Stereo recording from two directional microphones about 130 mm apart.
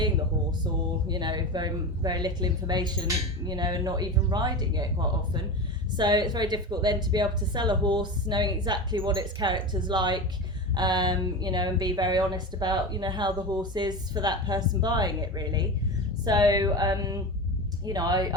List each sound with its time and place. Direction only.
0.6 s speech: 35° right (ahead or behind)